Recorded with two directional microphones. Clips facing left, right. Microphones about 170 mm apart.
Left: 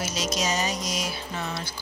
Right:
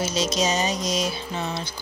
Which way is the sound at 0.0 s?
25° right (ahead or behind).